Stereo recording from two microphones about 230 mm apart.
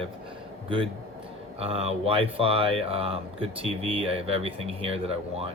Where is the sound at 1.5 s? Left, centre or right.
Right.